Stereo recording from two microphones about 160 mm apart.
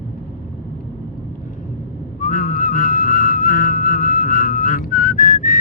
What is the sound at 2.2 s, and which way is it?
Whistling, 60° left (ahead or behind).